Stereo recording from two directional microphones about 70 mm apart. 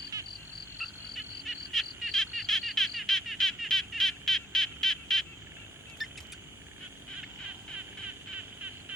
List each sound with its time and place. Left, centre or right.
0.1 s frog: right
0.8 s frog: centre
6.0 s a sound: centre